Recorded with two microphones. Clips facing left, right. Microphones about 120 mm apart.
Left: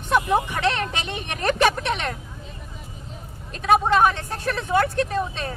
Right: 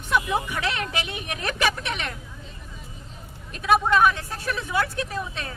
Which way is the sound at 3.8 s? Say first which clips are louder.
Left 1 dB; 30° left (ahead or behind).